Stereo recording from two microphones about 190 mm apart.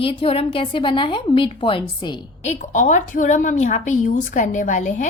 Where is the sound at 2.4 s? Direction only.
40° left (ahead or behind).